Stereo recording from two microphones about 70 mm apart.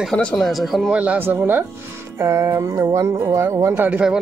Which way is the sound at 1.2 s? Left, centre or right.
Right.